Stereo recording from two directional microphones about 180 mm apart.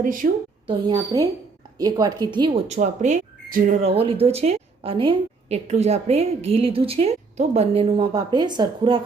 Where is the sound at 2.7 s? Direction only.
40° right (ahead or behind).